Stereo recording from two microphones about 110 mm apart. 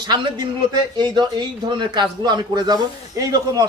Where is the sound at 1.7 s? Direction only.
45° right (ahead or behind).